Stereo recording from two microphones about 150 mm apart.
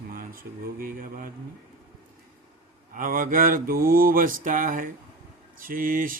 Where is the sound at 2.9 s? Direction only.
65° right (ahead or behind).